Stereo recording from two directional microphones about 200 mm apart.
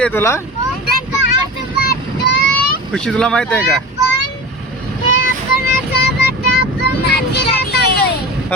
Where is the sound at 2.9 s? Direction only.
5° left (ahead or behind).